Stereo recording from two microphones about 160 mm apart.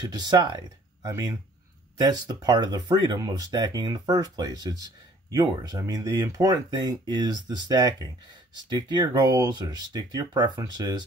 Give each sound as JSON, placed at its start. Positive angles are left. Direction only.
{"t": 0.0, "sound": "speech", "side_deg": -25}